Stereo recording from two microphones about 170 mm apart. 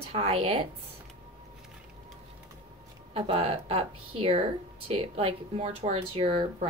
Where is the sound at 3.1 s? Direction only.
35° right (ahead or behind).